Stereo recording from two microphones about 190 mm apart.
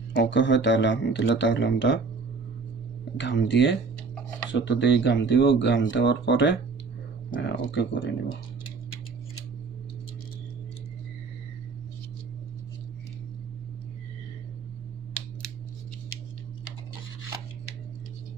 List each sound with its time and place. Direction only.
0.1 s speech: 70° left (ahead or behind)
3.2 s speech: 70° left (ahead or behind)